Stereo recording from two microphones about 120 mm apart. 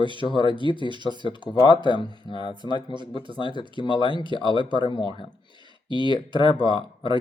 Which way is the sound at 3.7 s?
40° left (ahead or behind).